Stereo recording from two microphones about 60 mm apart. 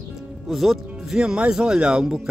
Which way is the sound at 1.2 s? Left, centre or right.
Centre.